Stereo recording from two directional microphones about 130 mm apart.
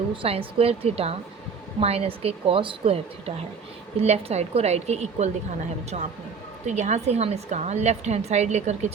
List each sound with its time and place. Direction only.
0.1 s a woman's voice: 45° right (ahead or behind); by 8.9 s 65° right (ahead or behind)